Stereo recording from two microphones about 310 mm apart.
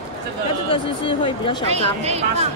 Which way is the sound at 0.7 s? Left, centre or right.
Centre.